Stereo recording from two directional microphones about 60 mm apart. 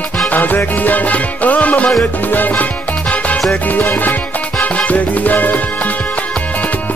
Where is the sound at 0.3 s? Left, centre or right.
Left.